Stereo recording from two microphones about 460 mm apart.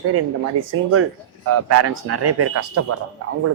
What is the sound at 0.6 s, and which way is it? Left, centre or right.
Speech, right.